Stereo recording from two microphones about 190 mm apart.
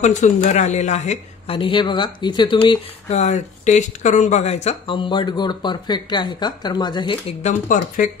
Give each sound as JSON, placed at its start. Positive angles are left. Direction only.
{"t": 0.0, "sound": "speech", "side_deg": 40}
{"t": 7.6, "sound": "speech", "side_deg": 45}